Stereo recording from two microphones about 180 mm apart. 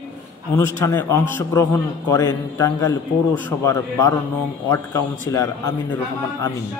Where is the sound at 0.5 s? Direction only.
15° left (ahead or behind).